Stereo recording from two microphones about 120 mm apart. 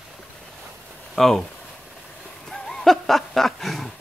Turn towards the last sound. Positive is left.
turn(degrees=0)  # may be behind; listen again after turning